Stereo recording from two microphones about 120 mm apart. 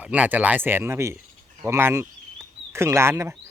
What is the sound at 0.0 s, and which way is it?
A man's voice, 10° right (ahead or behind).